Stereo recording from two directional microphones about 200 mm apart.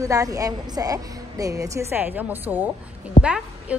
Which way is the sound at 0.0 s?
15° right (ahead or behind).